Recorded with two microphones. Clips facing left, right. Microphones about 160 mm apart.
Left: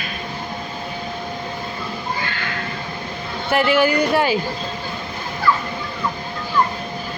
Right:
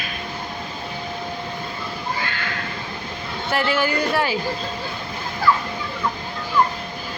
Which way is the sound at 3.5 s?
15° left (ahead or behind).